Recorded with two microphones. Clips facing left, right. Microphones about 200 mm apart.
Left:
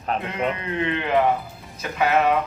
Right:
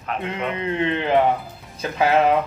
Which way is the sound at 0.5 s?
30° right (ahead or behind).